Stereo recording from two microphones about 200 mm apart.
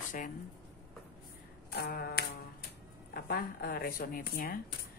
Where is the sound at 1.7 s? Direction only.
50° left (ahead or behind).